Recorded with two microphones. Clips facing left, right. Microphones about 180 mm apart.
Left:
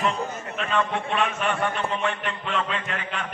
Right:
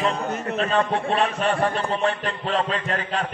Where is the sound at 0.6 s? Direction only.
35° right (ahead or behind).